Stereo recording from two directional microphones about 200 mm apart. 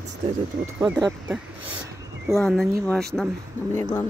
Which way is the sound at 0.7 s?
10° right (ahead or behind).